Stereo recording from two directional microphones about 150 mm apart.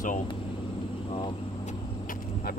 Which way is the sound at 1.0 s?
35° left (ahead or behind).